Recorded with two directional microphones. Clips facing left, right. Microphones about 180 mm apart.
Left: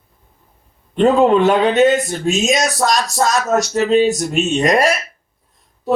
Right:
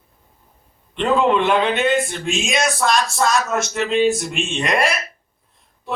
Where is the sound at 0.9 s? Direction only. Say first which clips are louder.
Left 5 dB; 40° left (ahead or behind).